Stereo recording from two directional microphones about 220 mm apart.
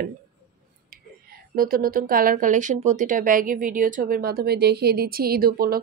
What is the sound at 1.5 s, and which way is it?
Speech, 40° right (ahead or behind).